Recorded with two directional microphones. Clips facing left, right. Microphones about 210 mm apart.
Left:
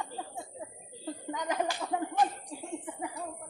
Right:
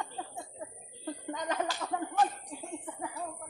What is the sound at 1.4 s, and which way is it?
Slap, 10° left (ahead or behind).